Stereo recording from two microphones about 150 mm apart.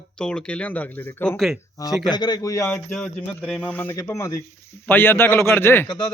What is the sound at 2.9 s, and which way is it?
A man's voice, 5° left (ahead or behind).